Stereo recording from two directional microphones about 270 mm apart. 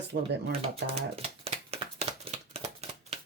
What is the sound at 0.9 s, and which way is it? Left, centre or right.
Shuffling cards, right.